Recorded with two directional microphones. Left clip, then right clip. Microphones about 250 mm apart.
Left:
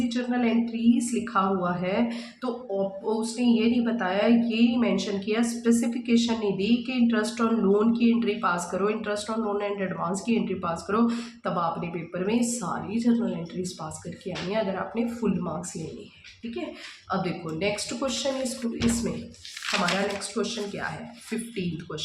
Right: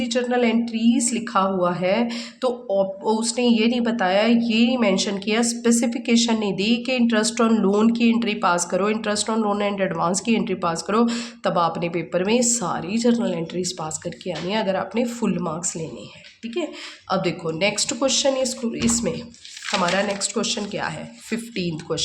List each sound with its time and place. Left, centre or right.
0.1 s a woman's voice: right
17.1 s a woman's voice: right
20.3 s a woman's voice: right